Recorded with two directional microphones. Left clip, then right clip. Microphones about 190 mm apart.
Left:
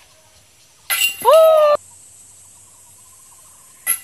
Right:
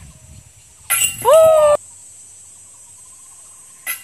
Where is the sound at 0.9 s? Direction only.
5° right (ahead or behind).